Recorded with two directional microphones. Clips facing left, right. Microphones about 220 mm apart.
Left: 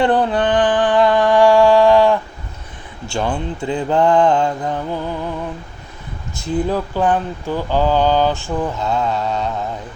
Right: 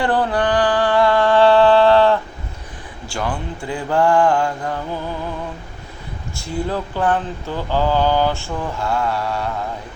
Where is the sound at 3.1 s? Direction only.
25° left (ahead or behind).